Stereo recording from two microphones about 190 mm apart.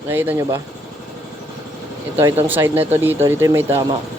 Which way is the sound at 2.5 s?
10° right (ahead or behind).